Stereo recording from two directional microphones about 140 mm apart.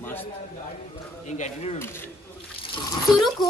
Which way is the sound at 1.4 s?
50° left (ahead or behind).